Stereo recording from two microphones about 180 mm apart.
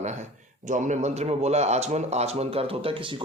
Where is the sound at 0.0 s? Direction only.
40° right (ahead or behind).